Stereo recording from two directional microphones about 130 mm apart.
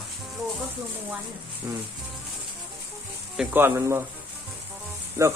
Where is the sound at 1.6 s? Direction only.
25° right (ahead or behind).